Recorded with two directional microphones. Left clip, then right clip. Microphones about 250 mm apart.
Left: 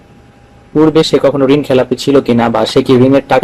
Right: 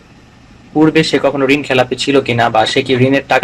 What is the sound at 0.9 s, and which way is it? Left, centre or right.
Speech, left.